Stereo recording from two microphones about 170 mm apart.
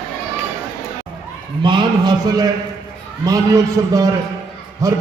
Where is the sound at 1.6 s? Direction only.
25° right (ahead or behind).